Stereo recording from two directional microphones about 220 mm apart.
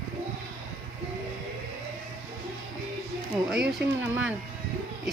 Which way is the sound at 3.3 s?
Centre (ahead or behind).